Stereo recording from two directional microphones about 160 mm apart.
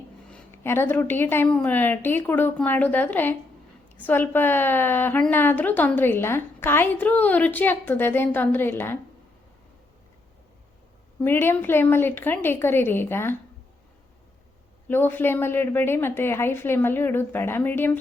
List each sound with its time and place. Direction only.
0.3 s a woman's voice: 10° left (ahead or behind)
11.2 s a woman's voice: 15° left (ahead or behind)
14.8 s a woman's voice: 15° left (ahead or behind)